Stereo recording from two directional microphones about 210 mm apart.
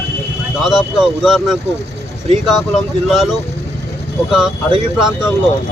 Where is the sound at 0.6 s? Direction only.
Centre (ahead or behind).